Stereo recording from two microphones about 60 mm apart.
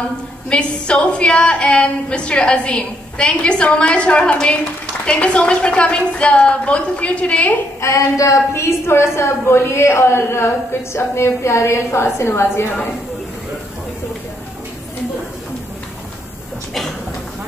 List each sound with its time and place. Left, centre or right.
0.5 s a woman's voice: centre
7.8 s a woman's voice: left